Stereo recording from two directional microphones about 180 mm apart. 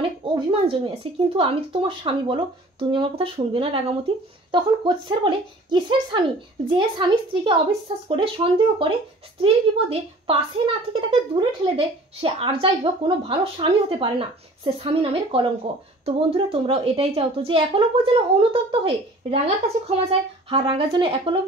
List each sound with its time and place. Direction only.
0.0 s speech: 30° right (ahead or behind)